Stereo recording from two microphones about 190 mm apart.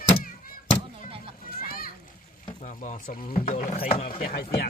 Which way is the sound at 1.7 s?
50° left (ahead or behind).